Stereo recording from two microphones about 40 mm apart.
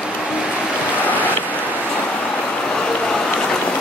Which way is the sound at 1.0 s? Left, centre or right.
Left.